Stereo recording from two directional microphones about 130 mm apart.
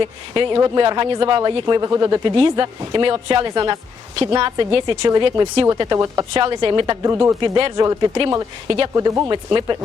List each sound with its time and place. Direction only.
0.0 s speech: 35° right (ahead or behind)
2.3 s speech: 40° right (ahead or behind); by 7.3 s 20° right (ahead or behind)
7.4 s speech: 35° right (ahead or behind)
9.0 s speech: 25° right (ahead or behind)